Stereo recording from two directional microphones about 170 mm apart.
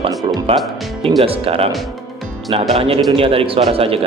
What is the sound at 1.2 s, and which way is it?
Speech, 35° right (ahead or behind).